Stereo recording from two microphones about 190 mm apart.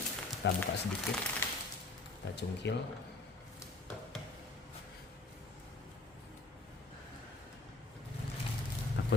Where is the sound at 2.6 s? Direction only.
65° left (ahead or behind).